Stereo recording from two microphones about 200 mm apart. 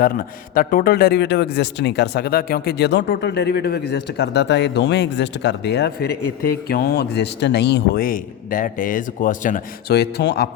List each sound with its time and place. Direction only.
0.0 s a man's voice: 45° left (ahead or behind)